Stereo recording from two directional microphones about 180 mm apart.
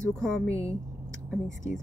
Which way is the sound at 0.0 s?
5° left (ahead or behind).